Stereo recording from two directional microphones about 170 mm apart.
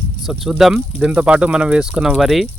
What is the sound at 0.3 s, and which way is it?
Speech, centre (ahead or behind).